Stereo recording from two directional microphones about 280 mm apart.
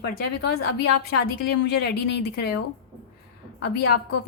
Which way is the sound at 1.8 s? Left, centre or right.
Left.